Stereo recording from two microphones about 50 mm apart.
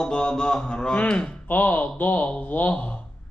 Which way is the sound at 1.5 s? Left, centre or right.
Left.